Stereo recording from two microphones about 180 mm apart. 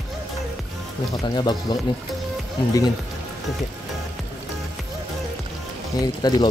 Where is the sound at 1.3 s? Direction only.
20° left (ahead or behind).